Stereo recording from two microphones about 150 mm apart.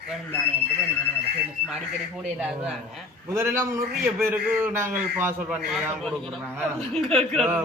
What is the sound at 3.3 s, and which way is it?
A man's voice, 20° right (ahead or behind).